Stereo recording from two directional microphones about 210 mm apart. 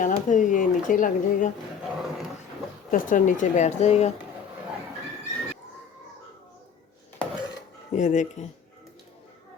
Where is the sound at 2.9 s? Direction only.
40° left (ahead or behind).